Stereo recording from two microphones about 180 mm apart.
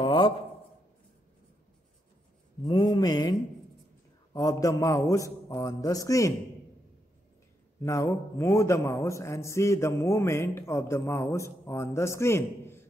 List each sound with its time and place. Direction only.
0.0 s a sound: 25° left (ahead or behind)
2.6 s mantra: 20° left (ahead or behind)
4.3 s a man's voice: 20° left (ahead or behind)
7.8 s a man's voice: 15° left (ahead or behind)